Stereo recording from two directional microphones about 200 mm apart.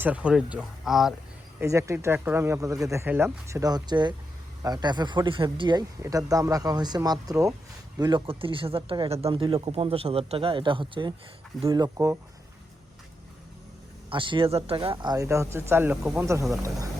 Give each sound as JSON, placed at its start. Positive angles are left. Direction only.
{"t": 0.0, "sound": "speech", "side_deg": -5}
{"t": 1.5, "sound": "speech", "side_deg": -15}
{"t": 14.1, "sound": "speech", "side_deg": -25}